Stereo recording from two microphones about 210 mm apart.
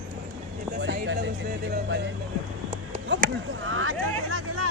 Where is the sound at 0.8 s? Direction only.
60° right (ahead or behind).